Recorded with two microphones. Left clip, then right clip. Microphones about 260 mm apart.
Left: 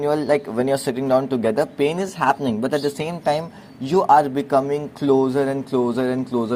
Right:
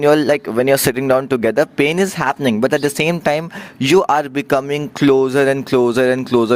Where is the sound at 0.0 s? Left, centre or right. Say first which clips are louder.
Right 6 dB; right.